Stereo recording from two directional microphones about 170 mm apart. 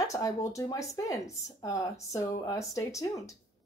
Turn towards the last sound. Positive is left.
turn(degrees=20)  # may be behind; listen again after turning